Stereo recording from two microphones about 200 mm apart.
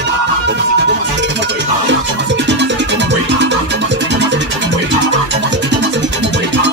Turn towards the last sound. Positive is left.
turn(degrees=-60)  # may be behind; listen again after turning